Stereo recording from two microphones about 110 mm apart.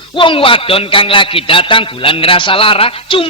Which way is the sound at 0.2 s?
50° left (ahead or behind).